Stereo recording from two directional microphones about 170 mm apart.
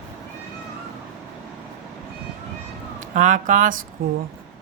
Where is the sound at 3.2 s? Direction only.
45° right (ahead or behind).